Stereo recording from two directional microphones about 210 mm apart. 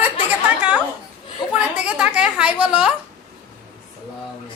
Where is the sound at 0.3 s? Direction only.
5° right (ahead or behind).